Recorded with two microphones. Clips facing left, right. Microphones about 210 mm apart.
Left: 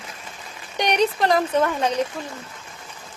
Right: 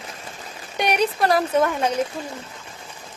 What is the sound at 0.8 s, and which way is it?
Speech, 5° right (ahead or behind).